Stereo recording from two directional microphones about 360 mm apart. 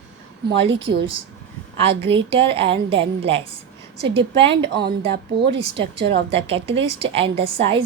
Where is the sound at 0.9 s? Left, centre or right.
Right.